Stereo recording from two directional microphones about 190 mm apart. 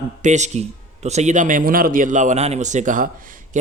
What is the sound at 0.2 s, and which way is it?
A man's voice, 40° right (ahead or behind).